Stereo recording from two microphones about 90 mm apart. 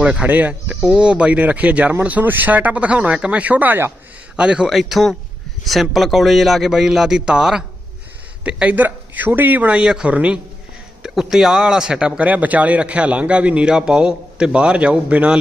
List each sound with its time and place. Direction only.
0.0 s speech: 15° right (ahead or behind)
4.4 s a man's voice: 10° right (ahead or behind)